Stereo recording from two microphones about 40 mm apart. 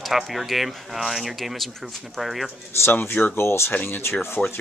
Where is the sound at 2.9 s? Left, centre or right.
Left.